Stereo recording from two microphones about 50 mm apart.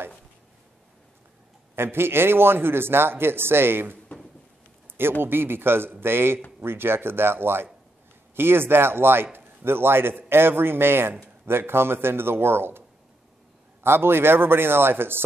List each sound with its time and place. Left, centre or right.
1.8 s a man's voice: right
4.8 s a sound: right
5.2 s a man's voice: right
13.8 s a man's voice: right